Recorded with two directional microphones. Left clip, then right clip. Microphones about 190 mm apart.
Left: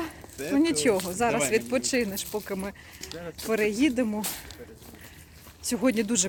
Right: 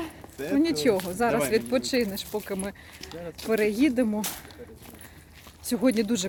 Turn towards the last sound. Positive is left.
turn(degrees=-5)  # may be behind; listen again after turning